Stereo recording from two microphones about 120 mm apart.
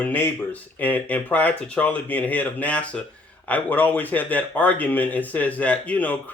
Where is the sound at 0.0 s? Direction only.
15° left (ahead or behind).